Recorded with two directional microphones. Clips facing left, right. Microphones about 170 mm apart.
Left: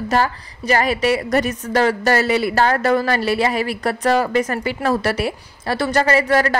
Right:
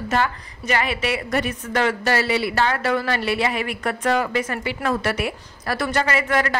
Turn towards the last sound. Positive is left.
turn(degrees=35)  # may be behind; listen again after turning